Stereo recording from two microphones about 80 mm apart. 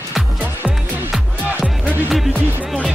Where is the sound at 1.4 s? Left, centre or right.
Centre.